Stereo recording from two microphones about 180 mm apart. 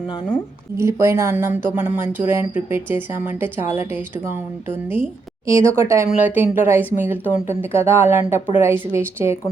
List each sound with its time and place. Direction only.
0.8 s speech: 15° right (ahead or behind)